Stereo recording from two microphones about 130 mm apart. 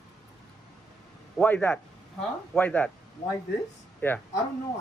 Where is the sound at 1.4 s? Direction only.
15° left (ahead or behind).